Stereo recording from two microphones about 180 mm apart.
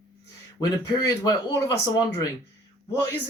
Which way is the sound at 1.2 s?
20° left (ahead or behind).